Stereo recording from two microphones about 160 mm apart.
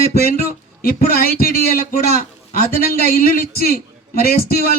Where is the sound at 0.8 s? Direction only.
65° left (ahead or behind).